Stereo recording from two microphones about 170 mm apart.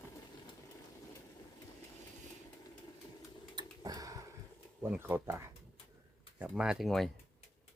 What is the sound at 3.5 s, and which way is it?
Tick-tock, 25° right (ahead or behind).